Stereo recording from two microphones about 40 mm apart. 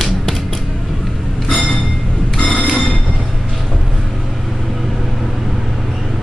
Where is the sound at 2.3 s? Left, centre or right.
Centre.